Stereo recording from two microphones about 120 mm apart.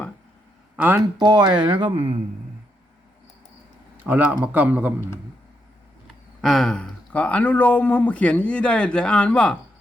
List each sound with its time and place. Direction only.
0.8 s a man's voice: 15° right (ahead or behind)
1.2 s speech: 35° right (ahead or behind)
3.9 s a man's voice: 15° right (ahead or behind)
6.4 s speech: centre (ahead or behind)